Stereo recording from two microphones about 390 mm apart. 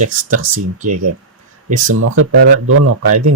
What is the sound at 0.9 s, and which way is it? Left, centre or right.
Speech, right.